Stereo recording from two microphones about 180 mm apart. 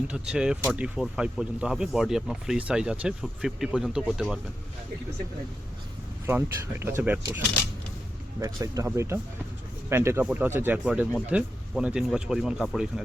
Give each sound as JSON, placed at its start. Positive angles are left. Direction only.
{"t": 0.1, "sound": "speech", "side_deg": -5}
{"t": 6.2, "sound": "speech", "side_deg": -15}